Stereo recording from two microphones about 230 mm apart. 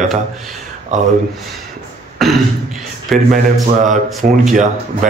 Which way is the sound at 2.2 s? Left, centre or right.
Centre.